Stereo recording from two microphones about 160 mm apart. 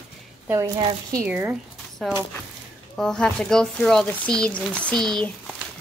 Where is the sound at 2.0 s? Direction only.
Centre (ahead or behind).